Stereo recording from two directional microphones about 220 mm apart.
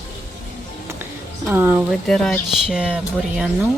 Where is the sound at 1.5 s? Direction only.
10° right (ahead or behind).